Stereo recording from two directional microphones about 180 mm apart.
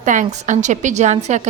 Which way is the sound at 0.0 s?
45° right (ahead or behind).